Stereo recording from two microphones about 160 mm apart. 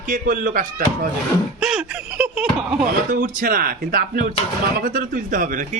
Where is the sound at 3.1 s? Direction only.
60° right (ahead or behind).